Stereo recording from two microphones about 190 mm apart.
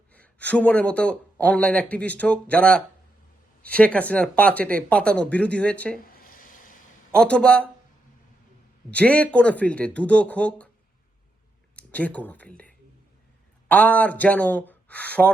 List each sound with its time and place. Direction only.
0.1 s speech: 5° left (ahead or behind)
6.1 s a sound: 50° left (ahead or behind)
7.1 s speech: 5° left (ahead or behind)
8.9 s speech: 5° left (ahead or behind)
11.8 s speech: 5° left (ahead or behind)